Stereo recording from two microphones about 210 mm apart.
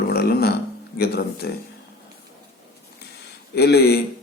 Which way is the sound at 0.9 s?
50° left (ahead or behind).